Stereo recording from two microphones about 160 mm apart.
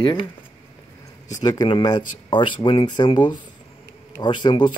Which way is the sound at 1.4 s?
25° left (ahead or behind).